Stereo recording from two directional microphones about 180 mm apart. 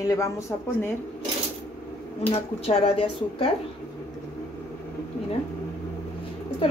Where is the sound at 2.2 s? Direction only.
35° left (ahead or behind).